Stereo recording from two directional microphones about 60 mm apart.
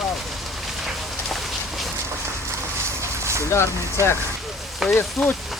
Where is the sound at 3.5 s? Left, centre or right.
Left.